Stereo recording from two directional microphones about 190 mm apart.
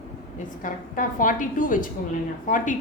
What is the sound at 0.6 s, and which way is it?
A woman's voice, 45° left (ahead or behind).